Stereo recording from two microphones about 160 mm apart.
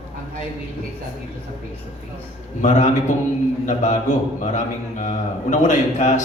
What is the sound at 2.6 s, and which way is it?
A man's voice, 50° left (ahead or behind).